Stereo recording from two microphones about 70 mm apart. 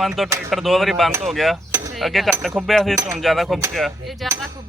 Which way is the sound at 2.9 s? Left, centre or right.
Right.